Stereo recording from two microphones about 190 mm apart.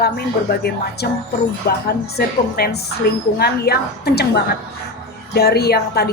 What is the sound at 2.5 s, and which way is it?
A woman's voice, 55° left (ahead or behind).